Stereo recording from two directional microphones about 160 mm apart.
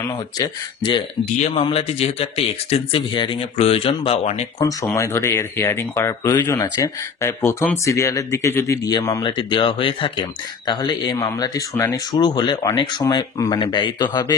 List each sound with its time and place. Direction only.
0.4 s speech: 30° left (ahead or behind)
1.4 s speech: 40° left (ahead or behind)
4.8 s speech: 15° left (ahead or behind)